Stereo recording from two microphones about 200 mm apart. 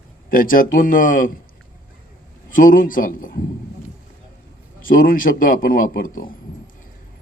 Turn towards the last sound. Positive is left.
turn(degrees=45)  # may be behind; listen again after turning